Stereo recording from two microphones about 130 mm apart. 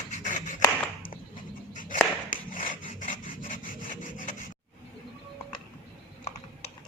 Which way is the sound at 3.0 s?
90° left.